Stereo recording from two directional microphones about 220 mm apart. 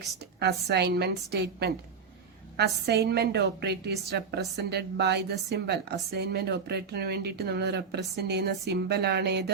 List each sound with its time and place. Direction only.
0.3 s a woman's voice: 50° right (ahead or behind)